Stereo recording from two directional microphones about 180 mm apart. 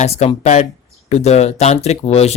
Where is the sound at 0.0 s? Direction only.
35° left (ahead or behind).